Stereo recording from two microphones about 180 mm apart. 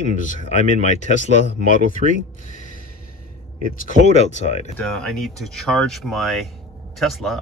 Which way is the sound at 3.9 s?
35° left (ahead or behind).